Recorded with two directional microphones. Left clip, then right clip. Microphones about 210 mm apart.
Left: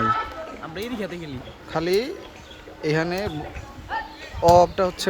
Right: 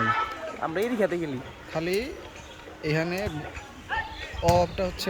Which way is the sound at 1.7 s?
5° left (ahead or behind).